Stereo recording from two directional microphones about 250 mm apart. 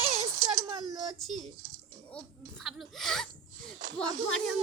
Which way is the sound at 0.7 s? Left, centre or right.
Centre.